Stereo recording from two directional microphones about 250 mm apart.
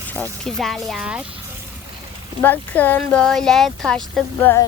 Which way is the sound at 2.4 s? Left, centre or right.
Centre.